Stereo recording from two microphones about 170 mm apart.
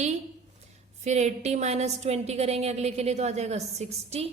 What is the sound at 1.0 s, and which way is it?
A woman's voice, 40° right (ahead or behind).